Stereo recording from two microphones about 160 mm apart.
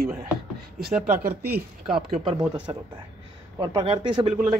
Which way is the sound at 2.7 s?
25° right (ahead or behind).